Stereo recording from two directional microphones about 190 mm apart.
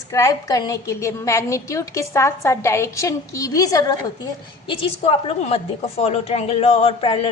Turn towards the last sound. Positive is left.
turn(degrees=30)  # may be behind; listen again after turning